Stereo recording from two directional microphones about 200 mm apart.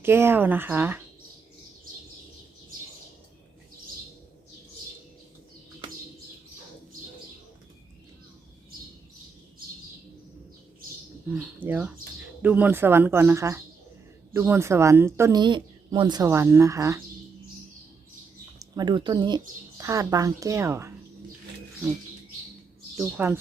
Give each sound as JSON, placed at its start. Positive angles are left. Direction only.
{"t": 0.0, "sound": "a woman's voice", "side_deg": -10}
{"t": 11.6, "sound": "a woman's voice", "side_deg": -5}
{"t": 18.6, "sound": "a woman's voice", "side_deg": -20}
{"t": 23.0, "sound": "a woman's voice", "side_deg": -10}